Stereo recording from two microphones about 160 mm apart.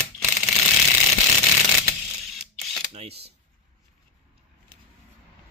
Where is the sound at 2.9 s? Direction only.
40° right (ahead or behind).